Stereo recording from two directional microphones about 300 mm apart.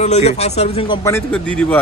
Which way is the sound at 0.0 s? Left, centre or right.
Left.